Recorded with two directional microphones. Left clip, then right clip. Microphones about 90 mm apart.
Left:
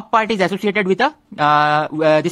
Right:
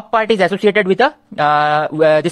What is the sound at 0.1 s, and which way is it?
A woman's voice, 10° right (ahead or behind).